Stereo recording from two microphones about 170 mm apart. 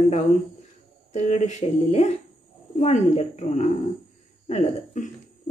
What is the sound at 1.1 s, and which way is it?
Speech, 45° left (ahead or behind).